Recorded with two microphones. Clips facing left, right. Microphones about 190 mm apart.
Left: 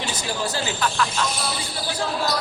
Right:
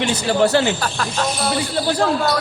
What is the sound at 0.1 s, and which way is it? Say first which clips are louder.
Speech: right 14 dB; 65° right (ahead or behind).